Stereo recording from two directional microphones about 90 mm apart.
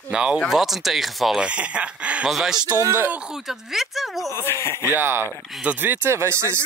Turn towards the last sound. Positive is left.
turn(degrees=-30)  # may be behind; listen again after turning